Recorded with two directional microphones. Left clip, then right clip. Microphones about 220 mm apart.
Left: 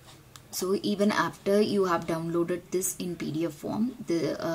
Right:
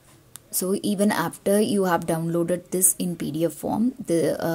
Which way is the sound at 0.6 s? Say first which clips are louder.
Right 3 dB; 35° right (ahead or behind).